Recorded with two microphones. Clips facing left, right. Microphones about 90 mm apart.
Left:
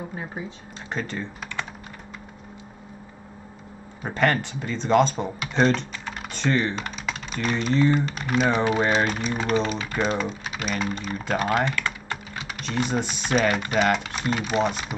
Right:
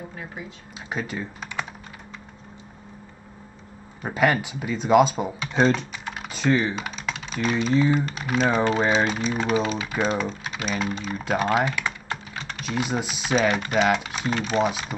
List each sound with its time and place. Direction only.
0.1 s speech: 25° left (ahead or behind)
0.8 s speech: 5° right (ahead or behind)
4.0 s speech: 5° right (ahead or behind)
12.4 s speech: 5° left (ahead or behind)